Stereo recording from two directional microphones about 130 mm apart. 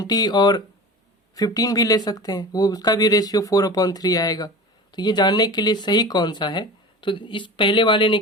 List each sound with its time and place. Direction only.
0.0 s speech: 30° left (ahead or behind)